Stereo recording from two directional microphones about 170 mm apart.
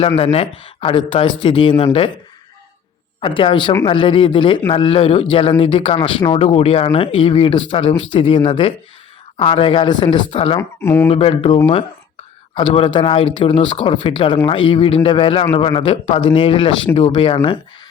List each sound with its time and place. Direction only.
0.2 s speech: 35° left (ahead or behind)
3.2 s a man's voice: 30° left (ahead or behind)
10.6 s speech: 15° left (ahead or behind)
11.1 s speech: 35° left (ahead or behind)